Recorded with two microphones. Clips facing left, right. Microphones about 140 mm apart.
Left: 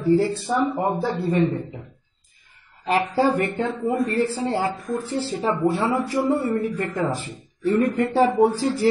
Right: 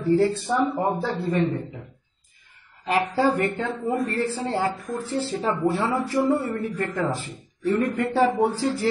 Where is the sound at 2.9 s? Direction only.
20° left (ahead or behind).